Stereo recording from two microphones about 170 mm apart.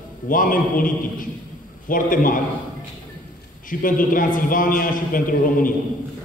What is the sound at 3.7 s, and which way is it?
A man's voice, 55° left (ahead or behind).